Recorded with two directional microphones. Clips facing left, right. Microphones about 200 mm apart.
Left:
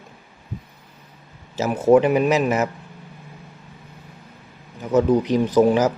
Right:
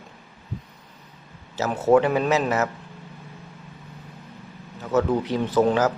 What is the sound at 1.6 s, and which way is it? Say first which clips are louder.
Speech: left 3 dB; 15° left (ahead or behind).